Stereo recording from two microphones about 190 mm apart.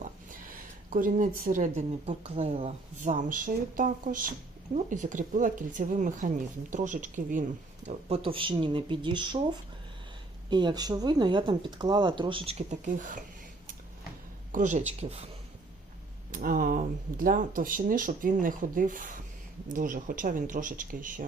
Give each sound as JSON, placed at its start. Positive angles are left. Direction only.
{"t": 0.9, "sound": "speech", "side_deg": -45}
{"t": 14.5, "sound": "speech", "side_deg": -40}
{"t": 16.3, "sound": "speech", "side_deg": -45}